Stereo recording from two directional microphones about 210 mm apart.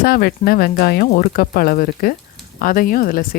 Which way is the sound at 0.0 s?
45° left (ahead or behind).